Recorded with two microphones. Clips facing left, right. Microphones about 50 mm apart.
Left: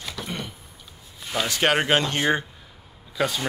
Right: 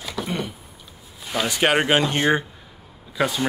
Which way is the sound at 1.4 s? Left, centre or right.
Centre.